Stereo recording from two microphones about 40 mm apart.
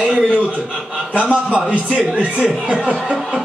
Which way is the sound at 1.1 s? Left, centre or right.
Right.